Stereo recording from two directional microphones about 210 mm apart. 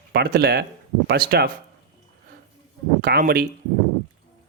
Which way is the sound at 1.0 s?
45° right (ahead or behind).